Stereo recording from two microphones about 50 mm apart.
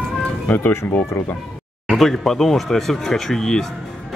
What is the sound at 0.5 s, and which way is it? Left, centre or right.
Speech, left.